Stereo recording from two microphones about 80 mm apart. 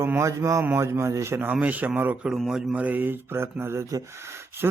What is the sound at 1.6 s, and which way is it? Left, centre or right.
Speech, centre.